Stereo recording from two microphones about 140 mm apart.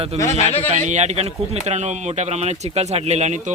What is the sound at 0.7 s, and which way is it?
Speech, 55° right (ahead or behind).